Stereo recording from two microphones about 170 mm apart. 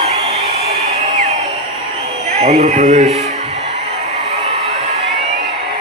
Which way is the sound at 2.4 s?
40° right (ahead or behind).